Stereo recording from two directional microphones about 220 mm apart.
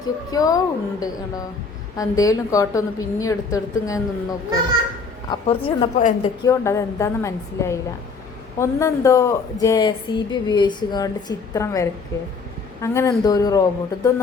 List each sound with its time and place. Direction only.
0.3 s a woman's voice: 15° left (ahead or behind)
6.4 s speech: 15° left (ahead or behind)